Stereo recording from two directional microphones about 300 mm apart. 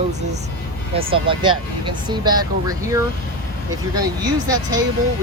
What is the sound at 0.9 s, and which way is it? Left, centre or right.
Speech, centre.